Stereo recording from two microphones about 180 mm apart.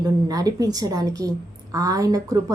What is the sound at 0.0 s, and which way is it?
A woman's voice, 20° right (ahead or behind).